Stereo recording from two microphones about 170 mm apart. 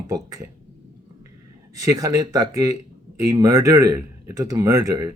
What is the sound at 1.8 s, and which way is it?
Speech, 20° right (ahead or behind).